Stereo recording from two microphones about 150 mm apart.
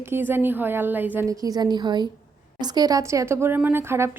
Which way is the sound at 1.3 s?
25° right (ahead or behind).